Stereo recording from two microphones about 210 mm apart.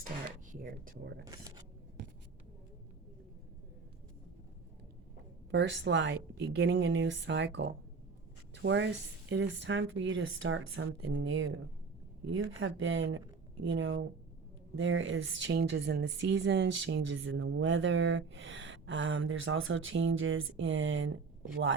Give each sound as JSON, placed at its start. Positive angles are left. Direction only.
{"t": 0.5, "sound": "speech", "side_deg": -40}
{"t": 1.2, "sound": "speech", "side_deg": -15}
{"t": 5.5, "sound": "a woman's voice", "side_deg": -55}